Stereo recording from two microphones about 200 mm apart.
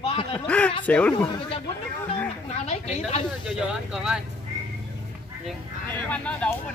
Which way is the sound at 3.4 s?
5° right (ahead or behind).